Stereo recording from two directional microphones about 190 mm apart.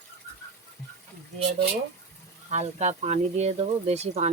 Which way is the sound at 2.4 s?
35° right (ahead or behind).